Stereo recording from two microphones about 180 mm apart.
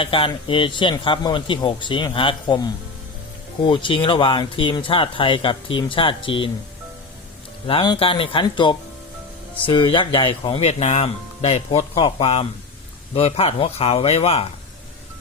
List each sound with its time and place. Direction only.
0.0 s speech: 30° left (ahead or behind)
7.7 s speech: 30° left (ahead or behind)